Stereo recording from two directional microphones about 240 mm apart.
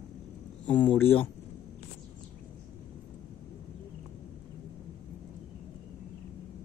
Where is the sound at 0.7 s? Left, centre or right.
Centre.